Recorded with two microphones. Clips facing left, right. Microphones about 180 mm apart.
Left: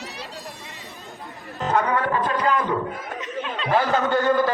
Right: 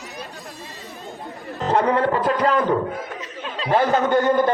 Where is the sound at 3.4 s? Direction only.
35° right (ahead or behind).